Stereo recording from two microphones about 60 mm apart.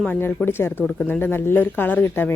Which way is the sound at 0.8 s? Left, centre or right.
Left.